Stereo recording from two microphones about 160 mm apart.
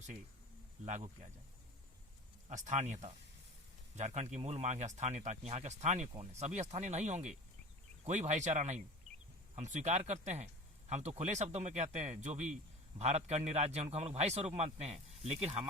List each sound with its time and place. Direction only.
0.9 s speech: 50° right (ahead or behind)
2.5 s speech: 50° right (ahead or behind)